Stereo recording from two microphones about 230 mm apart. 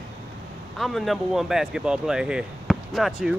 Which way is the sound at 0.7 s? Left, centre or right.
Centre.